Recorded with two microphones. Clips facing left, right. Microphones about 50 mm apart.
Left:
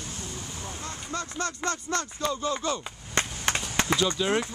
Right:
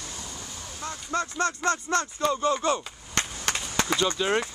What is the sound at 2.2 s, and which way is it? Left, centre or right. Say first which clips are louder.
Speech: right 5 dB; centre.